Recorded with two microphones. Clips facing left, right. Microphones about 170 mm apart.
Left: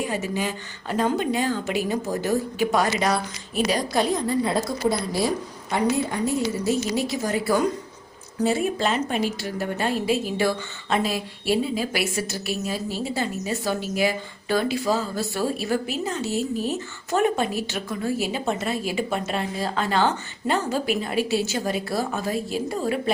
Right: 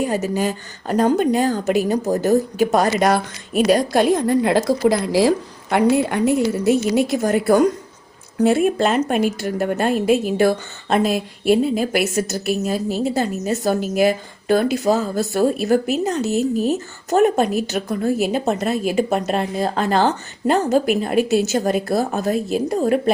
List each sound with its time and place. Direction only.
0.0 s a woman's voice: 40° right (ahead or behind)
5.7 s a woman's voice: 70° right (ahead or behind); by 7.7 s 50° right (ahead or behind)
8.4 s a woman's voice: 60° right (ahead or behind)